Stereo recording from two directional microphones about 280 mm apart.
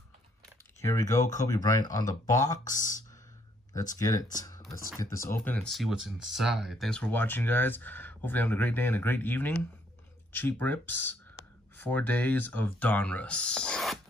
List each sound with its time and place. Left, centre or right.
0.7 s speech: centre
2.6 s speech: left
3.9 s speech: centre
4.4 s computer keyboard: centre
4.6 s speech: centre